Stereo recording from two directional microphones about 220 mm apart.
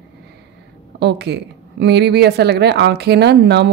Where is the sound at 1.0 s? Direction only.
50° right (ahead or behind).